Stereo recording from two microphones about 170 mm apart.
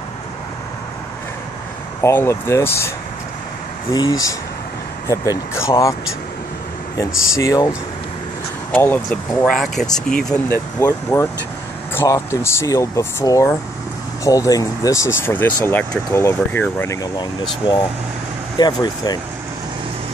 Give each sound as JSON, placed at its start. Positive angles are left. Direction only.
{"t": 2.0, "sound": "speech", "side_deg": 15}
{"t": 3.9, "sound": "speech", "side_deg": 20}
{"t": 7.0, "sound": "speech", "side_deg": 20}
{"t": 8.7, "sound": "speech", "side_deg": 10}
{"t": 10.8, "sound": "speech", "side_deg": 20}